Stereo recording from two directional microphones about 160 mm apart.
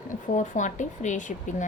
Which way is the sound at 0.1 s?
50° left (ahead or behind).